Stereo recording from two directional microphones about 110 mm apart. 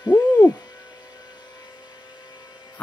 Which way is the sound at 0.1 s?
20° left (ahead or behind).